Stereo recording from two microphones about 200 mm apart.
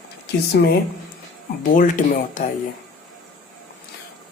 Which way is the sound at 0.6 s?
55° left (ahead or behind).